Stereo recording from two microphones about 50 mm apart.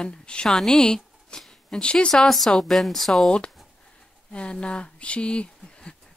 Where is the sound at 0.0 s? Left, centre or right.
Centre.